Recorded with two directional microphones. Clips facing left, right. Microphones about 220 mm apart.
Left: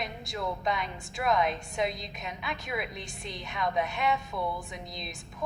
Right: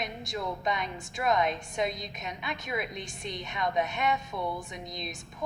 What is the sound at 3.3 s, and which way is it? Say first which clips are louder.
A woman's voice: even; centre (ahead or behind).